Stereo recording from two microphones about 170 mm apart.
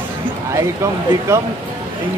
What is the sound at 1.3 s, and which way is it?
Speech, 15° right (ahead or behind).